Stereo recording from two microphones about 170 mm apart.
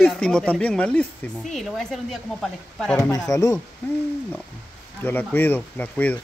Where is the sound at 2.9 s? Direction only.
20° left (ahead or behind).